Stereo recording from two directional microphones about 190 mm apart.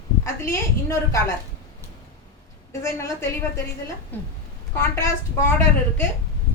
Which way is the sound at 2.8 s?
15° left (ahead or behind).